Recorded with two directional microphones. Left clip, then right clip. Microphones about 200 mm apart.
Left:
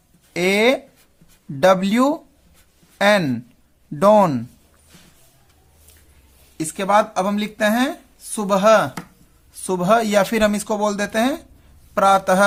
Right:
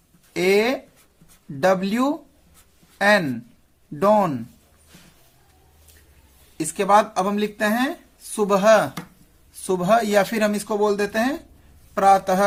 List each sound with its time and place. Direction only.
0.3 s speech: 30° left (ahead or behind)
6.6 s speech: 20° left (ahead or behind)